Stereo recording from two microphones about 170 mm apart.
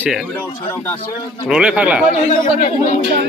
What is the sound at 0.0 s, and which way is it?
Speech, 5° right (ahead or behind).